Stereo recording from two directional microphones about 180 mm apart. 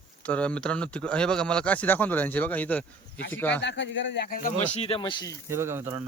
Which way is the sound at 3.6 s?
80° left.